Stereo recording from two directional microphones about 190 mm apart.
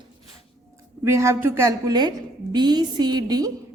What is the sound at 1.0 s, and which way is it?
A woman's voice, 15° right (ahead or behind).